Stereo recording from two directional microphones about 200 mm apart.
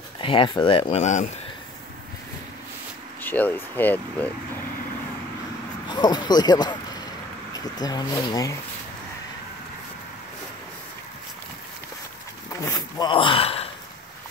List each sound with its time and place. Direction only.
0.2 s speech: 25° left (ahead or behind)
3.2 s speech: 10° left (ahead or behind)
5.9 s speech: 20° left (ahead or behind)
7.8 s speech: 20° left (ahead or behind)
12.5 s speech: 15° left (ahead or behind)
13.1 s speech: 25° left (ahead or behind)